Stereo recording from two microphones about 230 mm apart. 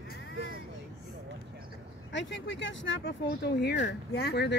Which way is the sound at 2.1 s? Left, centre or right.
Left.